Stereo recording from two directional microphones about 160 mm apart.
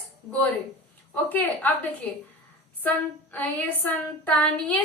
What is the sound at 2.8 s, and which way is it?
A woman's voice, 10° left (ahead or behind).